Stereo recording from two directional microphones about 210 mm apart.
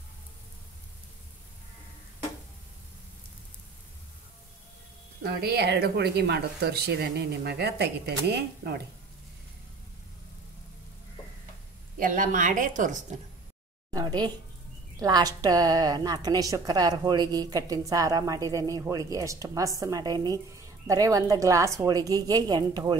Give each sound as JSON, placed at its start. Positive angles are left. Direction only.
{"t": 5.2, "sound": "speech", "side_deg": -50}
{"t": 12.0, "sound": "a woman's voice", "side_deg": -40}
{"t": 13.9, "sound": "a woman's voice", "side_deg": -20}